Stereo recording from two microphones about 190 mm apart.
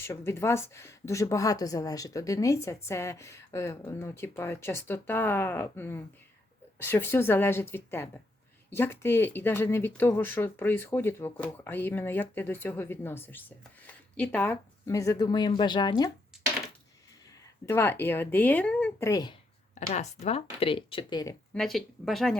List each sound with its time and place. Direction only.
0.0 s a woman's voice: 10° left (ahead or behind)
17.7 s a woman's voice: 10° left (ahead or behind)
19.7 s speech: 35° left (ahead or behind); by 21.3 s 20° left (ahead or behind)
21.5 s speech: centre (ahead or behind)